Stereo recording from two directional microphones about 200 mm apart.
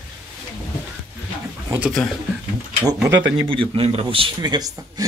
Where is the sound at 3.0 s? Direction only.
15° right (ahead or behind).